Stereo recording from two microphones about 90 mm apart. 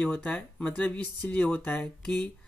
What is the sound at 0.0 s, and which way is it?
Speech, 10° left (ahead or behind).